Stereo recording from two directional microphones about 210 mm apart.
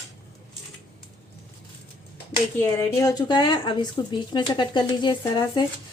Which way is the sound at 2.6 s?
15° left (ahead or behind).